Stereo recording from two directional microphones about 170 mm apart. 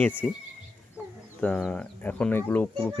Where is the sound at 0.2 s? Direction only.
5° left (ahead or behind).